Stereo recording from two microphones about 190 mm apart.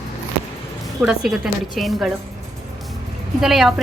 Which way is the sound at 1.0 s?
5° right (ahead or behind).